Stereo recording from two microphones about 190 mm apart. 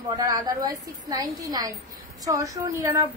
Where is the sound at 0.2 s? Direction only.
20° right (ahead or behind).